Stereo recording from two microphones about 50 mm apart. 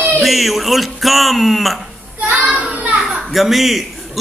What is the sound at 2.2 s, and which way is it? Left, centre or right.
Child singing, right.